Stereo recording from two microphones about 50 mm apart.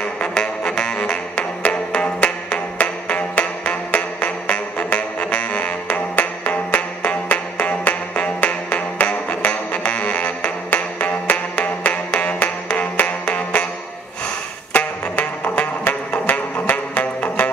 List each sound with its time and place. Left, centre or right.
0.2 s music: centre
15.4 s music: left